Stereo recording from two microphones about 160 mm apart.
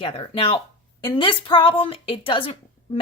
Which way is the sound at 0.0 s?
30° left (ahead or behind).